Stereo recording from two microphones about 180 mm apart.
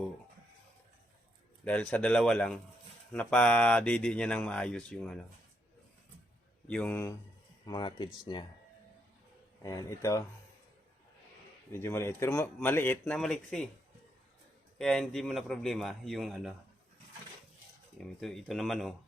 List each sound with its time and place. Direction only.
1.6 s a man's voice: 10° left (ahead or behind)
6.7 s a man's voice: 10° left (ahead or behind)
7.7 s speech: 25° left (ahead or behind)
9.6 s a man's voice: 15° left (ahead or behind)
11.7 s a man's voice: 15° left (ahead or behind)
14.8 s speech: centre (ahead or behind)
17.9 s speech: centre (ahead or behind)